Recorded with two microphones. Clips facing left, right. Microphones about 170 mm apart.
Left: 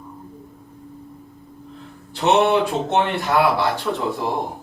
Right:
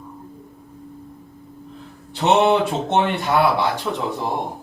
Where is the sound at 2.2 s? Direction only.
20° right (ahead or behind).